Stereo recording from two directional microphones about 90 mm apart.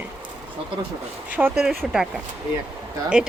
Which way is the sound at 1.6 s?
5° right (ahead or behind).